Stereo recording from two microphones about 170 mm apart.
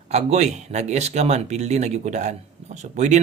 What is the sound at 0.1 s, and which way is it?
Speech, 40° right (ahead or behind).